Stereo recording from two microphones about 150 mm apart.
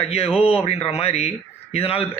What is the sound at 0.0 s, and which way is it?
A man's voice, 40° left (ahead or behind).